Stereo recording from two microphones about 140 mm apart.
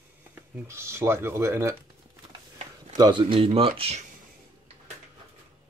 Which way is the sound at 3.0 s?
35° right (ahead or behind).